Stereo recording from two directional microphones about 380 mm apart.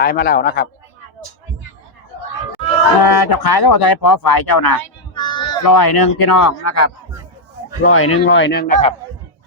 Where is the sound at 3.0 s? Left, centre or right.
Left.